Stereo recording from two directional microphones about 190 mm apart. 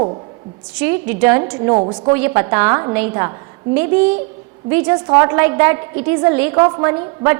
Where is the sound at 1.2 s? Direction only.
15° right (ahead or behind).